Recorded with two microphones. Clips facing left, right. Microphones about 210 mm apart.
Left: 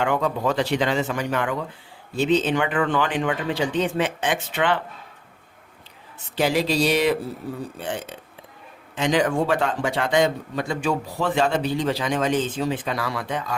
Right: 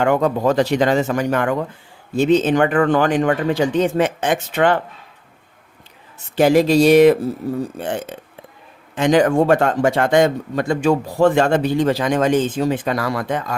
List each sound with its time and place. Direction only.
0.0 s a man's voice: 45° right (ahead or behind)
6.3 s a man's voice: 50° right (ahead or behind)